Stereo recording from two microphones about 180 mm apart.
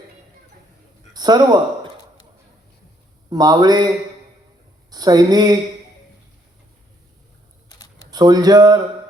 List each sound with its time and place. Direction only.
1.1 s speech: 20° right (ahead or behind)
3.2 s speech: 20° right (ahead or behind)
4.9 s speech: 20° right (ahead or behind)
8.1 s speech: 20° right (ahead or behind)